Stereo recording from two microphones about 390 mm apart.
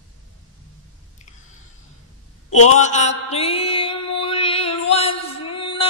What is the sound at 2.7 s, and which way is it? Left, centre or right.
Mantra, centre.